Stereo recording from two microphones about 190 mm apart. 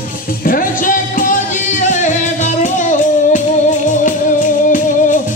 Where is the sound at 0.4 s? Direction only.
45° left (ahead or behind).